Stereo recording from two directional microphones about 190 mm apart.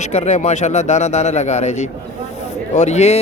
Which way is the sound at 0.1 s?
35° left (ahead or behind).